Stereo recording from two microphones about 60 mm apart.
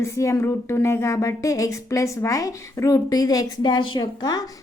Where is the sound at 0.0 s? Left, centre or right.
Left.